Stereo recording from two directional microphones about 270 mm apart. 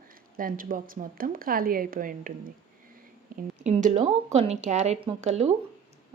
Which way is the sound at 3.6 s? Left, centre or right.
Right.